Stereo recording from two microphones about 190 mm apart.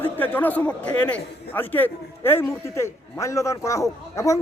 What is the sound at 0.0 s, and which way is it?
A man's voice, 10° left (ahead or behind).